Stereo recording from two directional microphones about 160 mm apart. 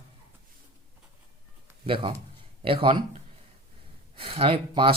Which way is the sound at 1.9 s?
35° right (ahead or behind).